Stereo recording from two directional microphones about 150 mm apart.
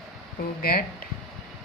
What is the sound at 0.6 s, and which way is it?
Speech, 75° left (ahead or behind).